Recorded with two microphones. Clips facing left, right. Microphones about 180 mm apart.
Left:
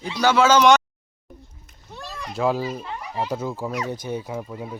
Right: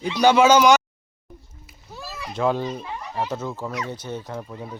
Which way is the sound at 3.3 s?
10° left (ahead or behind).